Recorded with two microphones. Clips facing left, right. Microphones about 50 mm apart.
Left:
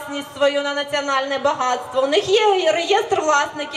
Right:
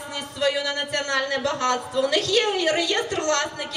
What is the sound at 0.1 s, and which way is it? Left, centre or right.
A man's voice, left.